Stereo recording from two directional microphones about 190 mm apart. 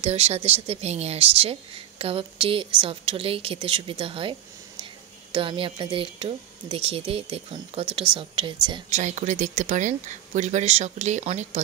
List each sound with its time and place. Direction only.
0.0 s a woman's voice: 35° right (ahead or behind)
8.9 s speech: 40° right (ahead or behind)